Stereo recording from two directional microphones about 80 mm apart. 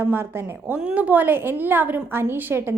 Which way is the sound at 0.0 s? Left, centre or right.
Right.